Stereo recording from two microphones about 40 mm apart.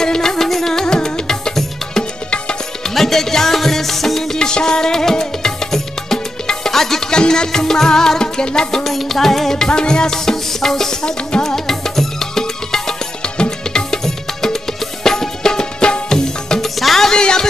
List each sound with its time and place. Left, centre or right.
0.0 s music: centre
4.4 s music: centre
7.1 s music: centre
8.8 s music: centre
9.7 s music: left
13.2 s music: left
13.8 s music: centre
16.6 s music: centre
17.1 s a sound: centre